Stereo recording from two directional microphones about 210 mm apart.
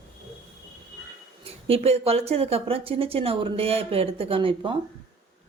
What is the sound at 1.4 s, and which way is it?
Speech, 30° right (ahead or behind).